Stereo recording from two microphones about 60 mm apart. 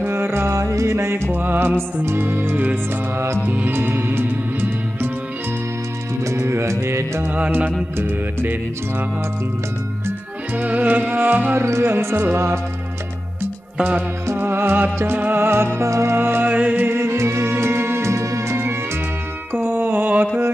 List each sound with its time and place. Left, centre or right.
0.0 s music: right
1.3 s music: right
6.4 s music: right
7.2 s music: right
8.0 s music: right
10.5 s music: right
11.8 s music: right
13.7 s music: right
14.3 s music: right
16.2 s music: right
16.4 s music: right
17.0 s music: right
19.5 s music: right